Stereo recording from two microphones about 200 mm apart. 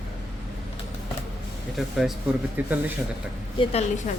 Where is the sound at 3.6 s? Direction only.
30° left (ahead or behind).